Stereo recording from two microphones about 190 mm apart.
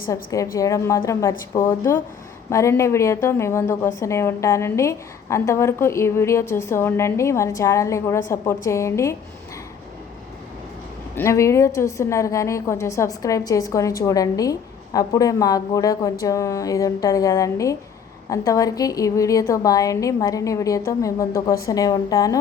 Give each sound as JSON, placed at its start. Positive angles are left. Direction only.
{"t": 0.1, "sound": "a woman's voice", "side_deg": 15}
{"t": 11.1, "sound": "a woman's voice", "side_deg": 15}